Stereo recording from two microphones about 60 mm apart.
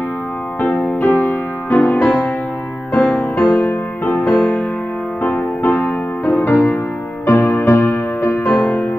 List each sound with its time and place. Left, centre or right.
0.6 s music: left